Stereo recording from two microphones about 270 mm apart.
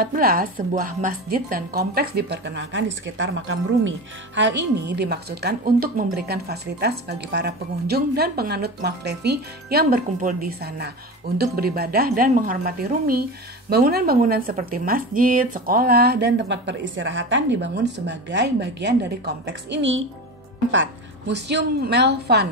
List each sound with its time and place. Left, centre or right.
0.0 s a woman's voice: right